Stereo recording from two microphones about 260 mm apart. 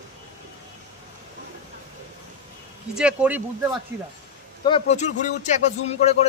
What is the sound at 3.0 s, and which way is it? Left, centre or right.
Speech, centre.